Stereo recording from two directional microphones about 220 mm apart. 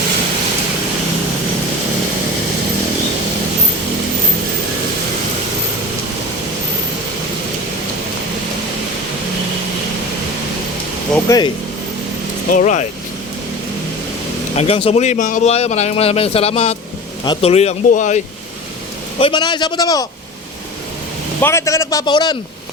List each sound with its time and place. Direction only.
11.3 s a man's voice: 20° left (ahead or behind)
12.5 s speech: 35° left (ahead or behind)
14.5 s speech: 30° left (ahead or behind)
19.2 s speech: 20° left (ahead or behind)
21.4 s a man's voice: 15° left (ahead or behind)